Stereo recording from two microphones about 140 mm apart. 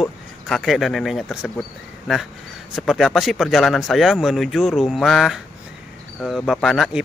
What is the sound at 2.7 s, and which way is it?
Speech, centre (ahead or behind).